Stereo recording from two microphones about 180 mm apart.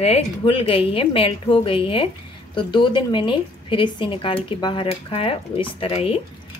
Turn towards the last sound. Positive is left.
turn(degrees=30)  # may be behind; listen again after turning